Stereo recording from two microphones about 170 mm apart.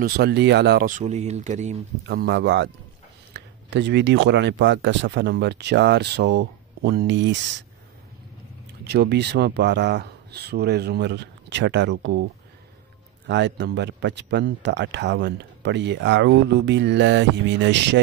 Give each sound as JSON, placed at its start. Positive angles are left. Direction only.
{"t": 0.0, "sound": "speech", "side_deg": -75}
{"t": 0.8, "sound": "speech", "side_deg": -45}
{"t": 2.0, "sound": "speech", "side_deg": -75}
{"t": 8.8, "sound": "speech", "side_deg": -75}
{"t": 13.3, "sound": "speech", "side_deg": -90}